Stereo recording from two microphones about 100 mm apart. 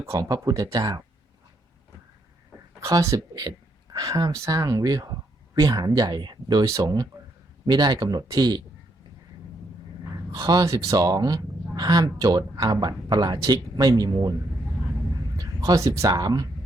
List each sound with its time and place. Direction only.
0.0 s speech: 35° right (ahead or behind)
2.8 s speech: 30° right (ahead or behind)
6.7 s speech: 30° right (ahead or behind)
10.3 s speech: 40° right (ahead or behind)
15.4 s speech: 35° right (ahead or behind)